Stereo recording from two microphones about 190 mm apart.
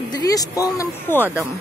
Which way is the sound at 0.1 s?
20° left (ahead or behind).